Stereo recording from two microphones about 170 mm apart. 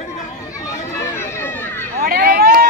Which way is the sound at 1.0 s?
15° left (ahead or behind).